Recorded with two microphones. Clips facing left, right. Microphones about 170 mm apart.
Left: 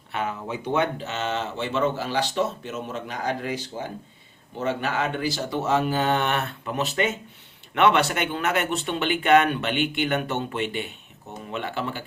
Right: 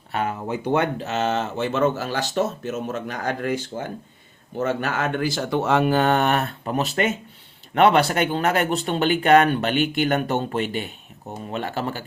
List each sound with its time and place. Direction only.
0.1 s speech: 45° right (ahead or behind)